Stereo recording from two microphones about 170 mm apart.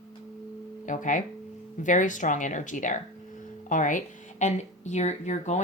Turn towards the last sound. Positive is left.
turn(degrees=45)  # may be behind; listen again after turning